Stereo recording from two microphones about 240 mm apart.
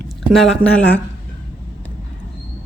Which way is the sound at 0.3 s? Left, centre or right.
Centre.